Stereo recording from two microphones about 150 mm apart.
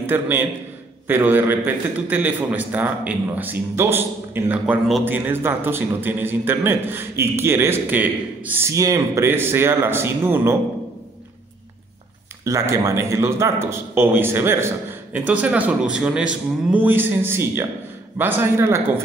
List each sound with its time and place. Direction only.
0.0 s a man's voice: 15° right (ahead or behind)
12.4 s a man's voice: 20° right (ahead or behind)